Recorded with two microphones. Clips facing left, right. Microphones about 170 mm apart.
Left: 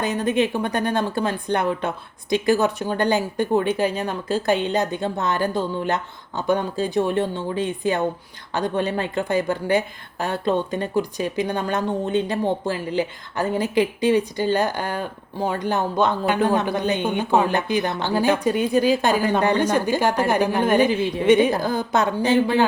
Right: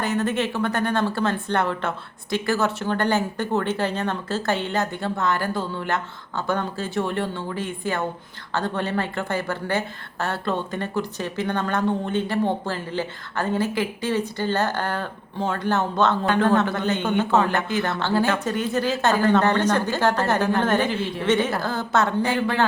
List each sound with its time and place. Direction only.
0.0 s a woman's voice: 15° left (ahead or behind)